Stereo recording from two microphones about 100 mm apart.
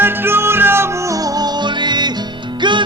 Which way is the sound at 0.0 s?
20° right (ahead or behind).